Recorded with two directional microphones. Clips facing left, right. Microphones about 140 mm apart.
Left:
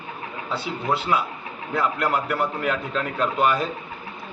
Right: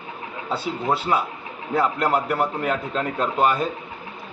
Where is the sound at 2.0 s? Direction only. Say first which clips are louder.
Right 2 dB; 20° right (ahead or behind).